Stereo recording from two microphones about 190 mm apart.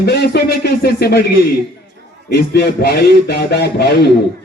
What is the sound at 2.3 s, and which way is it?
Speech, 60° left (ahead or behind).